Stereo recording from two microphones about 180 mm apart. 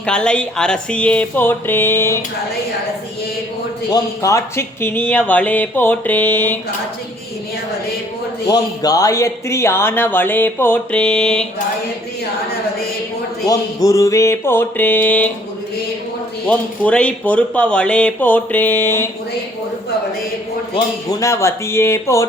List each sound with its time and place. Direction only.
0.0 s speech: 5° left (ahead or behind)
3.8 s speech: 20° left (ahead or behind)
8.4 s speech: 20° left (ahead or behind); by 11.4 s 5° left (ahead or behind)
13.8 s speech: 20° left (ahead or behind)
16.5 s speech: 5° left (ahead or behind)
20.7 s speech: 20° left (ahead or behind)